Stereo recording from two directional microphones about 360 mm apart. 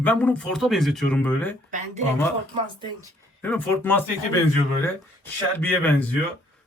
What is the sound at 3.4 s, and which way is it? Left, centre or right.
Speech, centre.